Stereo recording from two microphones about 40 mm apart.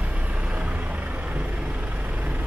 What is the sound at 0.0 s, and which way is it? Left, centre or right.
Vehicle, right.